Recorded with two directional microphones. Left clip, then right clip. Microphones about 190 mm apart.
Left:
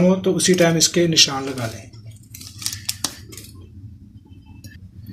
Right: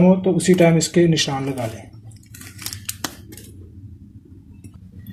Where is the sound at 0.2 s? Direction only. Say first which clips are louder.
Right 1 dB; 15° right (ahead or behind).